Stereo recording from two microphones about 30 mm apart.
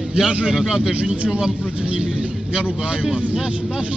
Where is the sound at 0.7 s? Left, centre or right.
Right.